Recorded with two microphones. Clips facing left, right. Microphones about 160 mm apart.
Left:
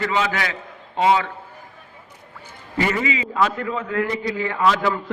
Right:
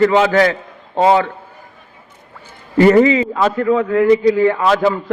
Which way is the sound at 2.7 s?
40° right (ahead or behind).